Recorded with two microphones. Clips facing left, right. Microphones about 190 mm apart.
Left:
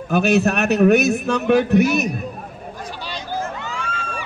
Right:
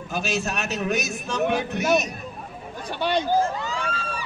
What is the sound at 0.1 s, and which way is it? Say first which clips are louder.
A man's voice: left 11 dB; 60° left (ahead or behind).